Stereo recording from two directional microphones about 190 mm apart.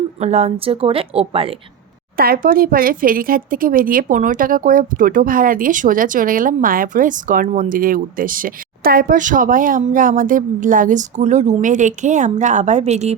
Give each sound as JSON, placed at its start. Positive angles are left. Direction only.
{"t": 0.2, "sound": "speech", "side_deg": -35}
{"t": 2.1, "sound": "speech", "side_deg": -50}